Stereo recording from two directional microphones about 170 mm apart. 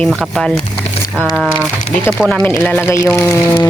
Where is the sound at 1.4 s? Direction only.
10° right (ahead or behind).